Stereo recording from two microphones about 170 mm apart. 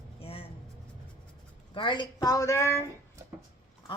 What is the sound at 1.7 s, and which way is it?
A woman's voice, 30° left (ahead or behind).